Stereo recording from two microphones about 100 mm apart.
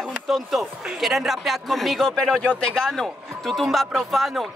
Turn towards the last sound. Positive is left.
turn(degrees=0)  # may be behind; listen again after turning